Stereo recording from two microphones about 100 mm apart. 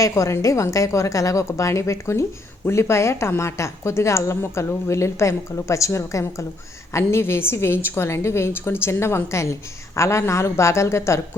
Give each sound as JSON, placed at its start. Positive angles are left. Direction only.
{"t": 0.0, "sound": "a woman's voice", "side_deg": 30}